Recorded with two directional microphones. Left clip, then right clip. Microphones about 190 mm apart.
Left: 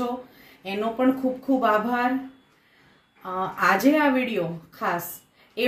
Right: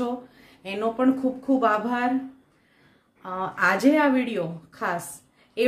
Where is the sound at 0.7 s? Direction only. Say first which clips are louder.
Even; centre (ahead or behind).